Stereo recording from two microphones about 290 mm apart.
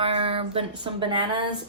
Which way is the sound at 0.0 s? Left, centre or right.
Centre.